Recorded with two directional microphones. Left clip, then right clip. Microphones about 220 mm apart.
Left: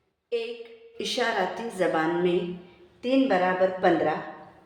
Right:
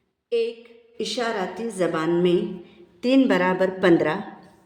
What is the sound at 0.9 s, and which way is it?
A woman's voice, 10° right (ahead or behind).